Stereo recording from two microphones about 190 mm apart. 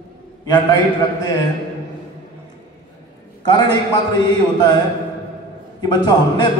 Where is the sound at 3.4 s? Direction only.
20° left (ahead or behind).